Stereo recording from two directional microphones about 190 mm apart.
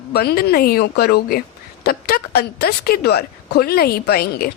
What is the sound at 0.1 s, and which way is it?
A woman's voice, 55° left (ahead or behind).